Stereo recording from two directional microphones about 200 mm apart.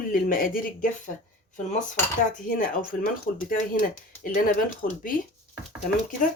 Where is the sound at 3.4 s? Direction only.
45° left (ahead or behind).